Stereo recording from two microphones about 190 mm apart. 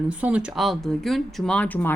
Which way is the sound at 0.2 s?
5° right (ahead or behind).